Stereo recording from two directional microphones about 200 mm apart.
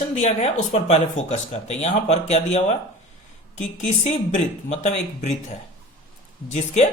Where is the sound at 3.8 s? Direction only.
35° left (ahead or behind).